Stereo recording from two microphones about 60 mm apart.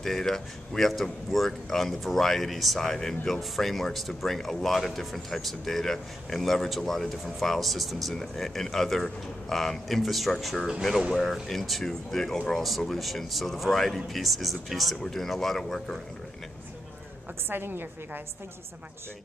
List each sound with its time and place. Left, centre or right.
0.0 s speech: centre
17.5 s a woman's voice: right